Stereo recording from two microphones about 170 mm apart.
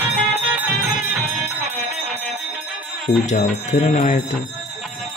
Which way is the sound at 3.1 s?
45° left (ahead or behind).